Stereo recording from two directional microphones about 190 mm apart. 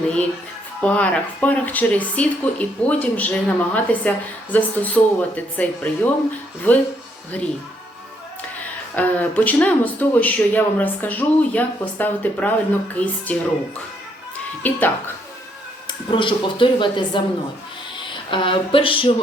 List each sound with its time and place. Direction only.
0.8 s speech: 5° left (ahead or behind)
9.0 s speech: 10° left (ahead or behind)
14.3 s speech: 10° left (ahead or behind)
15.9 s speech: 25° left (ahead or behind)
18.3 s speech: 25° left (ahead or behind)